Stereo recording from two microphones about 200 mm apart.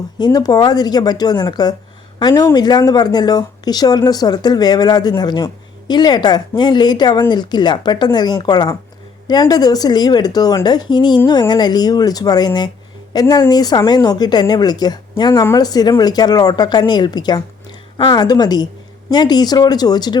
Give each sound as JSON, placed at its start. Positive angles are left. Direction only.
{"t": 0.2, "sound": "speech", "side_deg": 20}